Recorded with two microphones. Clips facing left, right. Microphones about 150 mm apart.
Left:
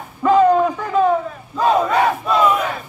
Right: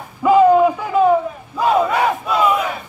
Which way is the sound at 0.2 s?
10° right (ahead or behind).